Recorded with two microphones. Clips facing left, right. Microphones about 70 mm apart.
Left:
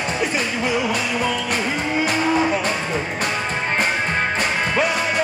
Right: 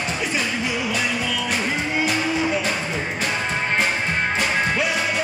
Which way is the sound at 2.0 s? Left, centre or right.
Left.